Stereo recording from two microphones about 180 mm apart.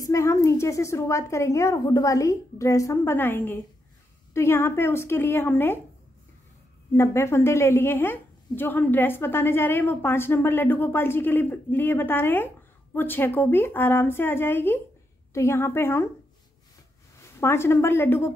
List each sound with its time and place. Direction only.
0.0 s a woman's voice: 15° left (ahead or behind)
7.0 s a woman's voice: 15° left (ahead or behind)
17.4 s a woman's voice: 15° left (ahead or behind)